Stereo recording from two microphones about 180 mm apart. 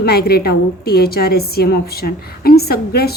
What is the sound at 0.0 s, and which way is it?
A woman's voice, 60° left (ahead or behind).